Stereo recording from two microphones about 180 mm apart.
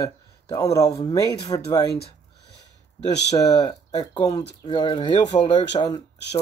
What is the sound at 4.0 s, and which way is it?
Speech, 30° left (ahead or behind).